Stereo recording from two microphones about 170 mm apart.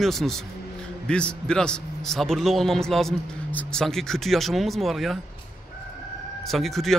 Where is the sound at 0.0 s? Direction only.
Centre (ahead or behind).